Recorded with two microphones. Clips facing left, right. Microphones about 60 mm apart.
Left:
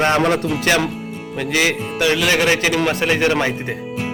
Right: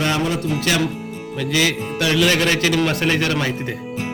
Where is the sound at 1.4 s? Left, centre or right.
Left.